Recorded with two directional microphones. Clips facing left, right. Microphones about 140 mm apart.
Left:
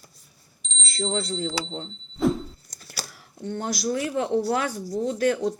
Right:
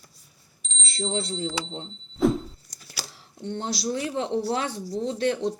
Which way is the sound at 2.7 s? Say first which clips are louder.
Left 2 dB; 50° left (ahead or behind).